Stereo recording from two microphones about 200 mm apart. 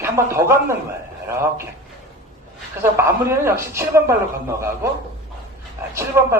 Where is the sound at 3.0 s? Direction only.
15° right (ahead or behind).